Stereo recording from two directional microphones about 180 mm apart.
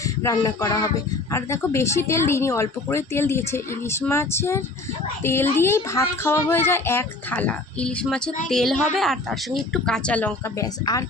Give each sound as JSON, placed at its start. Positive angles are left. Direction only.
{"t": 0.2, "sound": "music", "side_deg": 20}
{"t": 1.3, "sound": "speech", "side_deg": 15}
{"t": 10.6, "sound": "music", "side_deg": 20}